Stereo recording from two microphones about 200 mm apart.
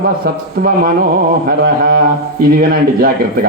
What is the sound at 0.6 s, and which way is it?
Speech, 50° right (ahead or behind).